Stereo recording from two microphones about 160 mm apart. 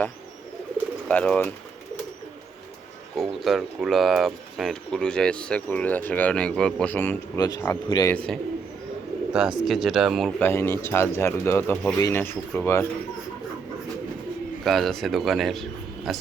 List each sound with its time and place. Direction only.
1.0 s speech: 5° left (ahead or behind)
3.2 s speech: centre (ahead or behind)
7.3 s speech: 25° left (ahead or behind)
8.1 s speech: 5° left (ahead or behind)
9.3 s speech: 5° right (ahead or behind)
10.4 s speech: 15° left (ahead or behind)
14.6 s speech: centre (ahead or behind)